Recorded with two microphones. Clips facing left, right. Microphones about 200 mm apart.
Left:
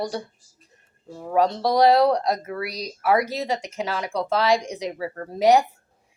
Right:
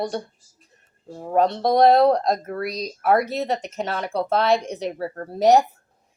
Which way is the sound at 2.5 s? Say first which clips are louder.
Right 3 dB; 10° left (ahead or behind).